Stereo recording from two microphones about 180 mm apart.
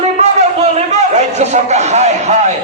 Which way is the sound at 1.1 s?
40° right (ahead or behind).